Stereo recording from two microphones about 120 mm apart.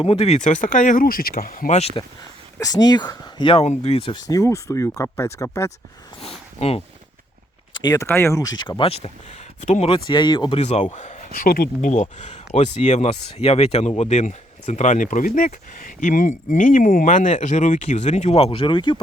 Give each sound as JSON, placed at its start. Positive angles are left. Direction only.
{"t": 0.0, "sound": "speech", "side_deg": 55}
{"t": 2.6, "sound": "speech", "side_deg": 30}
{"t": 3.5, "sound": "speech", "side_deg": 60}
{"t": 4.2, "sound": "speech", "side_deg": 30}
{"t": 6.6, "sound": "speech", "side_deg": 55}
{"t": 7.8, "sound": "speech", "side_deg": 35}
{"t": 8.0, "sound": "speech", "side_deg": 20}
{"t": 8.8, "sound": "speech", "side_deg": 55}
{"t": 10.1, "sound": "speech", "side_deg": 40}
{"t": 10.6, "sound": "a man's voice", "side_deg": 65}
{"t": 10.9, "sound": "a sound", "side_deg": 80}
{"t": 11.8, "sound": "speech", "side_deg": 85}